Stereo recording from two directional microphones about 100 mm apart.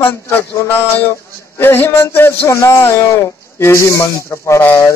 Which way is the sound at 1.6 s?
25° left (ahead or behind).